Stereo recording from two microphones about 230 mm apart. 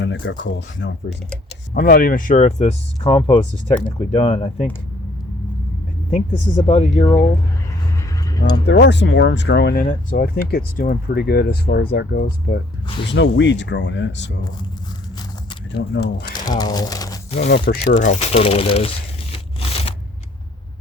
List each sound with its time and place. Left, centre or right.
0.0 s speech: left
1.7 s speech: left
6.1 s speech: left
8.6 s speech: left
13.1 s speech: left
15.9 s speech: left
16.4 s speech: centre
17.3 s speech: left
17.9 s crumpling: left